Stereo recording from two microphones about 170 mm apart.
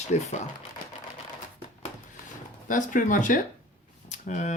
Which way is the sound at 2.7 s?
50° left (ahead or behind).